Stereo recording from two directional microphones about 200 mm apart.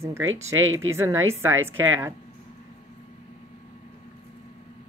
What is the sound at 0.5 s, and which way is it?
Speech, 85° right.